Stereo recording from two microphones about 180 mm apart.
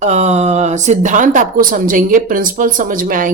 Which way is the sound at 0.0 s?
40° right (ahead or behind).